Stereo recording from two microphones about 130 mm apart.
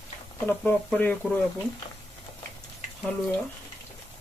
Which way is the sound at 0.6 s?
15° left (ahead or behind).